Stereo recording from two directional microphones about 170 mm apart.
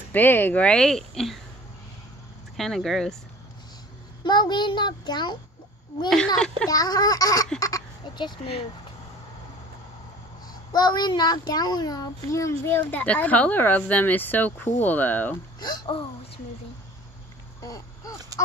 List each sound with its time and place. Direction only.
0.1 s speech: 10° left (ahead or behind)
2.5 s speech: centre (ahead or behind)
4.2 s a child's voice: 25° left (ahead or behind)
6.0 s speech: 5° left (ahead or behind)
6.7 s a child's voice: 20° left (ahead or behind)
10.5 s a child's voice: 25° left (ahead or behind); by 15.3 s 10° left (ahead or behind)
15.6 s a child's voice: 25° left (ahead or behind)
17.6 s a sound: 20° left (ahead or behind)